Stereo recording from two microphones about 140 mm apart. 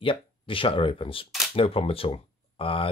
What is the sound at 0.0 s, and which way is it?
Speech, 40° left (ahead or behind).